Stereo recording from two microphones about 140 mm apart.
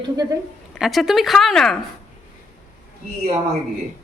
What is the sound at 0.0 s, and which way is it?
Speech, 30° right (ahead or behind).